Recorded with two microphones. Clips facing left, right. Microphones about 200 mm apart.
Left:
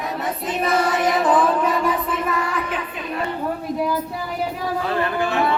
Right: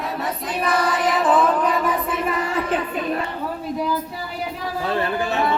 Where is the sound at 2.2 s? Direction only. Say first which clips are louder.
Right 1 dB; 25° right (ahead or behind).